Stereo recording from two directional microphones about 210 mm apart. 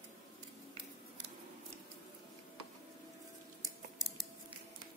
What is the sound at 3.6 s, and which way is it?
Scissors, 20° right (ahead or behind).